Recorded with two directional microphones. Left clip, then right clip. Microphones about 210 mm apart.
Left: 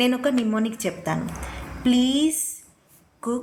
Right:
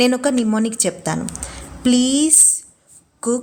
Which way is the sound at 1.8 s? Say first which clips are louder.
Right 4 dB; 70° right (ahead or behind).